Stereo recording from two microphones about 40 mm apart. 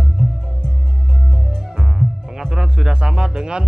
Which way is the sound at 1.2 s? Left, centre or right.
Centre.